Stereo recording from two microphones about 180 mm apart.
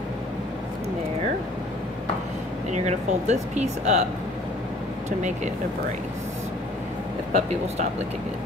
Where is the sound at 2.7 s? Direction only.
40° right (ahead or behind).